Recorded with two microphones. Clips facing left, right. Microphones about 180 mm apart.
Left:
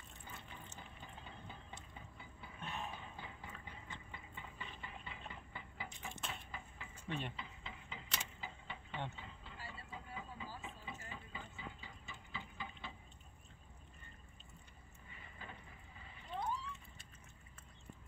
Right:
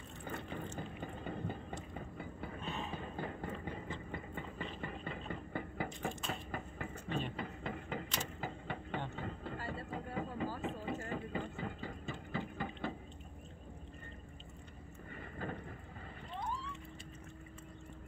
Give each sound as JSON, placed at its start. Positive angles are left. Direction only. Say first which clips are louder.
{"t": 0.2, "sound": "a sound", "louder": "right 12 dB", "side_deg": -60}
{"t": 9.1, "sound": "train", "louder": "right 12 dB", "side_deg": -55}
{"t": 15.0, "sound": "vehicle", "louder": "right 12 dB", "side_deg": -55}